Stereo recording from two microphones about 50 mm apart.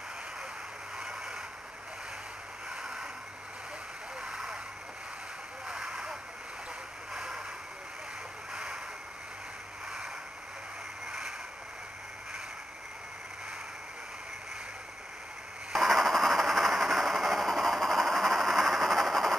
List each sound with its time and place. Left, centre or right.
0.9 s vehicle: centre
2.7 s a sound: centre
4.2 s vehicle: centre
5.7 s a sound: centre
7.2 s vehicle: centre
11.1 s vehicle: centre
15.7 s vehicle: centre